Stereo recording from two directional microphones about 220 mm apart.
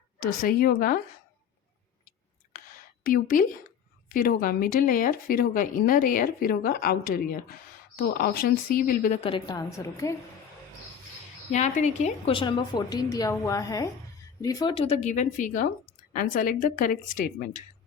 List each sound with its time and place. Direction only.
0.2 s a woman's voice: 40° left (ahead or behind)
3.0 s a woman's voice: 40° left (ahead or behind); by 10.2 s 15° left (ahead or behind)
11.5 s a woman's voice: 30° left (ahead or behind)